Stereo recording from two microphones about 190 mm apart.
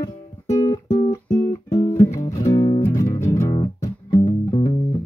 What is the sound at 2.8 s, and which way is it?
Music, 15° left (ahead or behind).